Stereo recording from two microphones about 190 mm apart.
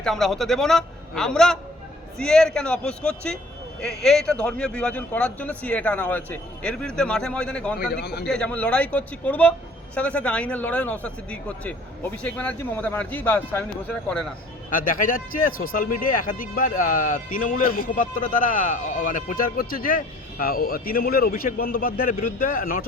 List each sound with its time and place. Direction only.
0.0 s speech: centre (ahead or behind)
7.8 s a man's voice: 60° left (ahead or behind)
8.3 s speech: 5° left (ahead or behind)
14.7 s speech: 45° left (ahead or behind)